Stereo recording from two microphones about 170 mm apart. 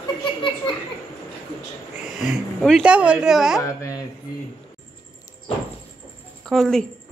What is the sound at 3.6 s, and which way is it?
Speech, 20° left (ahead or behind).